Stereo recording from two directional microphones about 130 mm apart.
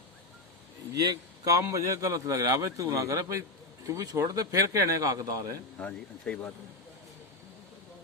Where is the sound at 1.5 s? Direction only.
25° right (ahead or behind).